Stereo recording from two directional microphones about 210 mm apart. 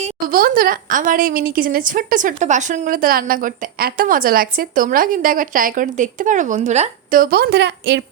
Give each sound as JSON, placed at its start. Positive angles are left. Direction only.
{"t": 0.0, "sound": "a woman's voice", "side_deg": -45}